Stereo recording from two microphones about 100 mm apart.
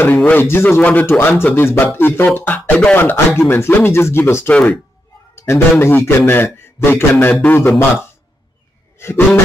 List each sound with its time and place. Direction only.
0.0 s a man's voice: 20° left (ahead or behind)
4.5 s speech: 15° left (ahead or behind)
5.3 s a man's voice: 25° left (ahead or behind)
8.9 s a sound: 25° left (ahead or behind)